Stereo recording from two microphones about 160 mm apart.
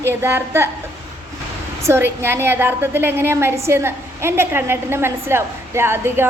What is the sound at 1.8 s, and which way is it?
A woman's voice, 15° right (ahead or behind).